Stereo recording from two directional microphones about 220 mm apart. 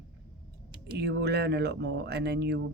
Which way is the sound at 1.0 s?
50° right (ahead or behind).